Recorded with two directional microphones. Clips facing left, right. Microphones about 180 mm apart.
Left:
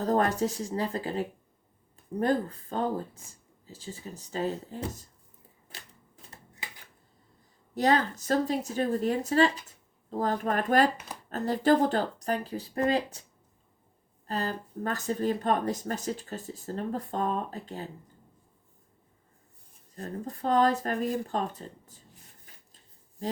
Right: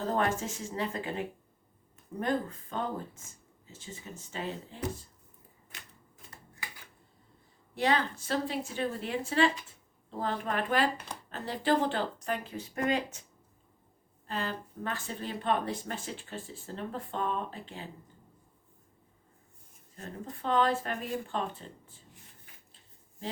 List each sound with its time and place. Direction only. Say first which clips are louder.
0.0 s speech: left 4 dB; 40° left (ahead or behind)
7.8 s speech: left 4 dB; 40° left (ahead or behind)
14.3 s speech: left 3 dB; 40° left (ahead or behind)
20.0 s speech: left 6 dB; 40° left (ahead or behind)
23.2 s speech: left 6 dB; 40° left (ahead or behind)